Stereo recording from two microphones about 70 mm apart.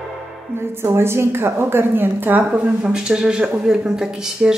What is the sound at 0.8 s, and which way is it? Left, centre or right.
A woman's voice, right.